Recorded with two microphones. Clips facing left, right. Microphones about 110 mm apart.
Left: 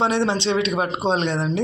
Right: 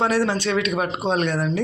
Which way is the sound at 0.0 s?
25° left (ahead or behind).